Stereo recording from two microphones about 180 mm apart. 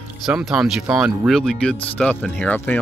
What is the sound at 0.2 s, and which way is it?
Speech, 5° right (ahead or behind).